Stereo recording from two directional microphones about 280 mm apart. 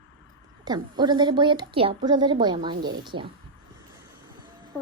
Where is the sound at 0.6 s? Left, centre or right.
Centre.